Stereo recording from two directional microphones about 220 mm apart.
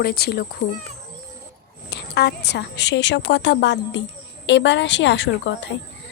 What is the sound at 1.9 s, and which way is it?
A woman's voice, 50° left (ahead or behind).